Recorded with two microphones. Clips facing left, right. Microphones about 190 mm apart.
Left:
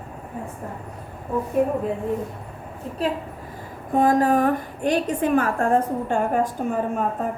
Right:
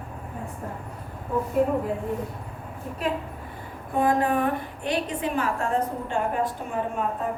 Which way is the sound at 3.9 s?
40° left (ahead or behind).